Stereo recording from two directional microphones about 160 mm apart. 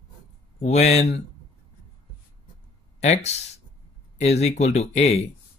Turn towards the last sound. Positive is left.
turn(degrees=40)  # may be behind; listen again after turning